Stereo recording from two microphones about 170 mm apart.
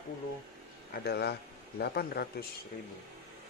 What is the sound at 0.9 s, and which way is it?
A man's voice, 70° left (ahead or behind).